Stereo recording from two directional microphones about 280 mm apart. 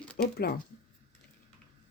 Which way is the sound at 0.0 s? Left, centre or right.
Centre.